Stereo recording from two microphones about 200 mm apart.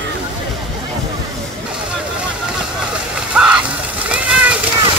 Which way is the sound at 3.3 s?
5° right (ahead or behind).